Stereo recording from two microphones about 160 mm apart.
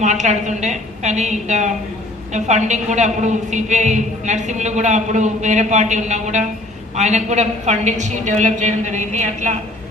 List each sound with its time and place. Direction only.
0.0 s a woman's voice: 50° right (ahead or behind)